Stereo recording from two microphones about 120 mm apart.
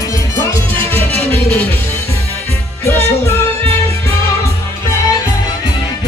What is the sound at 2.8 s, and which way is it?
Music, 20° left (ahead or behind).